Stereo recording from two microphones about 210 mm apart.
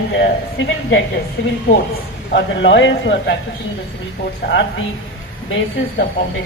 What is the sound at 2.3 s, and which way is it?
A woman's voice, 55° left (ahead or behind).